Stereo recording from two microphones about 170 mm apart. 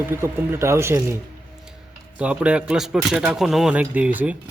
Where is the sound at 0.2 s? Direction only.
15° right (ahead or behind).